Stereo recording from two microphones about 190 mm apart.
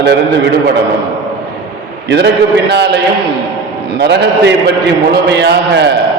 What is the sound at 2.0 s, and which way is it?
A man's voice, 60° right (ahead or behind).